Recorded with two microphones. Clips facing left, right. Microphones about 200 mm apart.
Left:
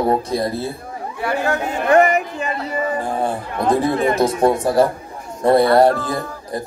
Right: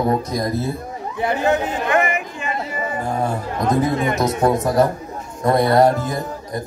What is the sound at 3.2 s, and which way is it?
A man's voice, 30° left (ahead or behind).